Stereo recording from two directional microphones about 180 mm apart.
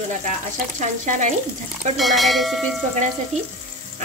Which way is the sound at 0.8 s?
45° right (ahead or behind).